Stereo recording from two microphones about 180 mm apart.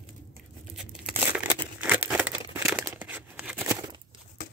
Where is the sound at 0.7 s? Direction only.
5° right (ahead or behind).